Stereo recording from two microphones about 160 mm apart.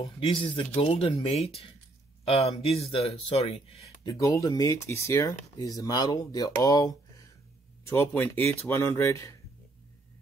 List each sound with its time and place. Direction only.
0.0 s speech: 35° left (ahead or behind)
4.0 s speech: 20° left (ahead or behind)